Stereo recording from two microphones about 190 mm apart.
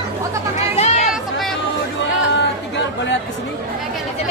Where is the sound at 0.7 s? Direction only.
35° left (ahead or behind).